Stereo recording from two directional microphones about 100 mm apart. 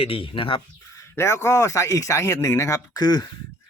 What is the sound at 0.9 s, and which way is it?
Speech, 25° left (ahead or behind).